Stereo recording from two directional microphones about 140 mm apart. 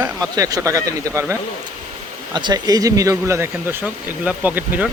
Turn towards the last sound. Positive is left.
turn(degrees=-10)  # may be behind; listen again after turning